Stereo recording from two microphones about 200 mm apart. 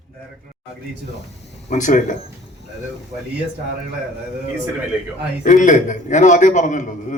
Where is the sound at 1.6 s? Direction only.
40° left (ahead or behind).